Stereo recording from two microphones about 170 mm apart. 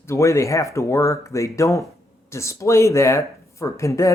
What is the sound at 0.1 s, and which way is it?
Speech, 15° left (ahead or behind).